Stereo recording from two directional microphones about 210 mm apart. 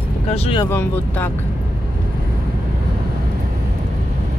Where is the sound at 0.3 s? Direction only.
25° left (ahead or behind).